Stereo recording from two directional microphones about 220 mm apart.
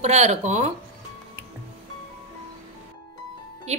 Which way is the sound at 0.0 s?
30° right (ahead or behind).